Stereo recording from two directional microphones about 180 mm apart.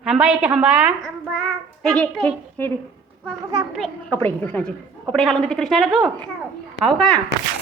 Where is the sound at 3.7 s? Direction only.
Centre (ahead or behind).